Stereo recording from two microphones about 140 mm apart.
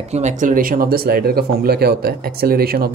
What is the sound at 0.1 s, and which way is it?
Speech, 55° right (ahead or behind).